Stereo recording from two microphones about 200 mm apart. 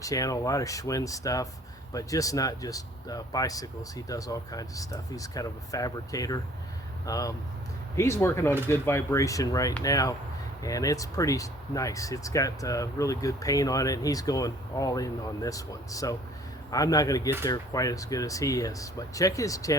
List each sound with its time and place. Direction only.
0.0 s speech: 15° left (ahead or behind)